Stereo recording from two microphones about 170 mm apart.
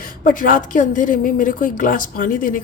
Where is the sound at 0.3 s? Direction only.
50° left (ahead or behind).